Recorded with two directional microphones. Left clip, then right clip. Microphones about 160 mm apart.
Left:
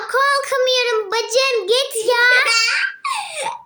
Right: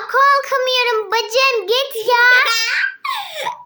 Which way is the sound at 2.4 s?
50° right (ahead or behind).